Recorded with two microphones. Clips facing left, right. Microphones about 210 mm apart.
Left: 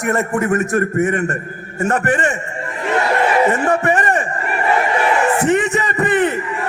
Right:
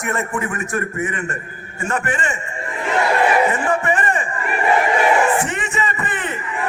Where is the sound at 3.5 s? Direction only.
40° left (ahead or behind).